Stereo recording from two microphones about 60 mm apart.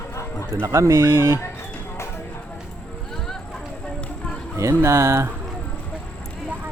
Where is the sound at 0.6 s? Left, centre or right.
Right.